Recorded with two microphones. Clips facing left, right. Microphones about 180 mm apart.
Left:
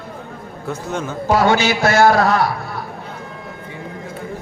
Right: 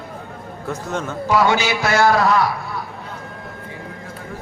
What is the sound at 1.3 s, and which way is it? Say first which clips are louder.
A man's voice: left 1 dB; 50° left (ahead or behind).